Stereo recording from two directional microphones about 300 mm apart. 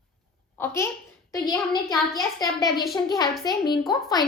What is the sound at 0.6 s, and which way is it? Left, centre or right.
A child's voice, centre.